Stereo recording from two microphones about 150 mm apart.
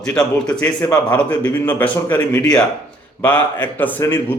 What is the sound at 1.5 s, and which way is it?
Speech, 10° left (ahead or behind).